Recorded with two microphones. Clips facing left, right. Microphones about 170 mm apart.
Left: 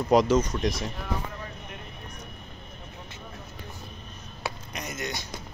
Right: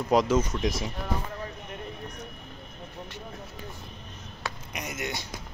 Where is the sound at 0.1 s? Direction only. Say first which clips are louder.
Left 2 dB; 5° right (ahead or behind).